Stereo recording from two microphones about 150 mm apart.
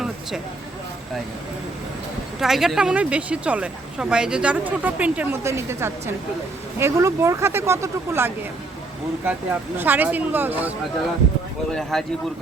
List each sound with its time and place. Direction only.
2.4 s speech: centre (ahead or behind)
11.7 s speech: 5° left (ahead or behind)